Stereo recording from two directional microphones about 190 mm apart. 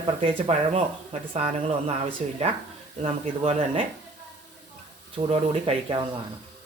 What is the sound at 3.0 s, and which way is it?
Speech, 30° right (ahead or behind).